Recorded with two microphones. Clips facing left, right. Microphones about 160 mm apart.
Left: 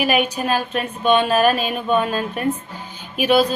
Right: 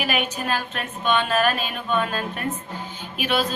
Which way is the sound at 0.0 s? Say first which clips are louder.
Left 6 dB; 15° left (ahead or behind).